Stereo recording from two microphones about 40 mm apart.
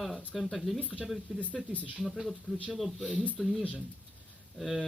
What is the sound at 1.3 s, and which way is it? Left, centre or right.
Speech, left.